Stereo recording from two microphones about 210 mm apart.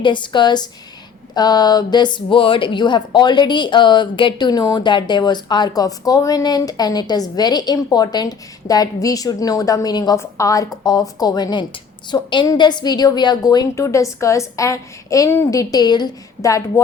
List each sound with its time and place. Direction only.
0.0 s a woman's voice: 20° left (ahead or behind)